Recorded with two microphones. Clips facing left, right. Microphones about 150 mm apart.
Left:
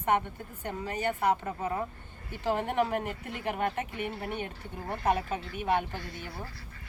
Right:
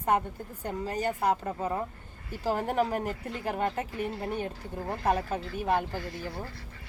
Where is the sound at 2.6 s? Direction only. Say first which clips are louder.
Right 1 dB; 40° right (ahead or behind).